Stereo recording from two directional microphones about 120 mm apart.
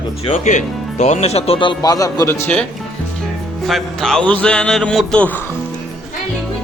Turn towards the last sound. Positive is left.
turn(degrees=10)  # may be behind; listen again after turning